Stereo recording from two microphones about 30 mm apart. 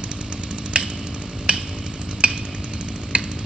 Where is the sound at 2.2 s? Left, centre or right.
Right.